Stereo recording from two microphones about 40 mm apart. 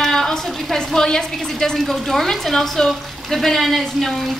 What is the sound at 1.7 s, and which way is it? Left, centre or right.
Speech, centre.